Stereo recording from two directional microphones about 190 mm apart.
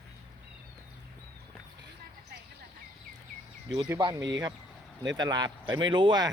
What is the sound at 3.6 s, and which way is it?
Speech, 25° right (ahead or behind).